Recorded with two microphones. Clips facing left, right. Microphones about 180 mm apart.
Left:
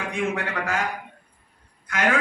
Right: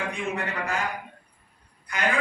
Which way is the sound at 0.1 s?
90° left.